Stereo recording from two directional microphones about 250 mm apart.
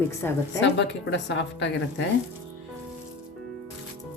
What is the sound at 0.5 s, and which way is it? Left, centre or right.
A woman's voice, left.